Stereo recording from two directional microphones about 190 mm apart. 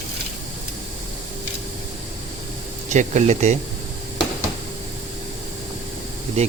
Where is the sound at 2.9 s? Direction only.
40° right (ahead or behind).